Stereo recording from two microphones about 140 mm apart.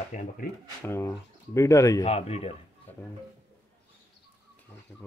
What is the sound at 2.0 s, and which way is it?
Speech, 50° left (ahead or behind).